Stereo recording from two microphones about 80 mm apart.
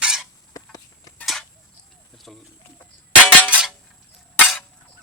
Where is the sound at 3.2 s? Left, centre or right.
Centre.